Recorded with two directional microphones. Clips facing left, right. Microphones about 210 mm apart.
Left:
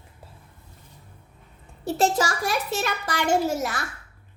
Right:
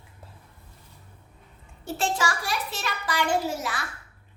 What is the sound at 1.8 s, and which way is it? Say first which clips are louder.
A child's voice: left 5 dB; 40° left (ahead or behind).